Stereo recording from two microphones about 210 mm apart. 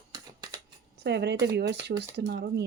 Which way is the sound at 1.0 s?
55° right (ahead or behind).